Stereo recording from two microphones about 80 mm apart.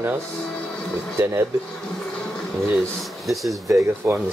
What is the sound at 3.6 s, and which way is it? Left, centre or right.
Speech, right.